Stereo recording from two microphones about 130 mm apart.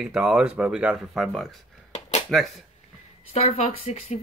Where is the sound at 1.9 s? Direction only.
60° left (ahead or behind).